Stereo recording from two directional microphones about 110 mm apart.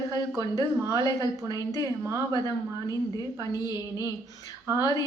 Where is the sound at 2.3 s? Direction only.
35° left (ahead or behind).